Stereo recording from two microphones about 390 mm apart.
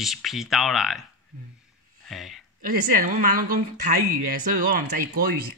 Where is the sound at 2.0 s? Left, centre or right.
Centre.